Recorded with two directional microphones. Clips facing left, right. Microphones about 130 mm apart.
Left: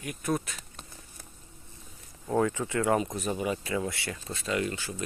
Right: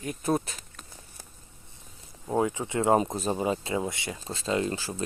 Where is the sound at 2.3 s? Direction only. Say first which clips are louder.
Even; 15° right (ahead or behind).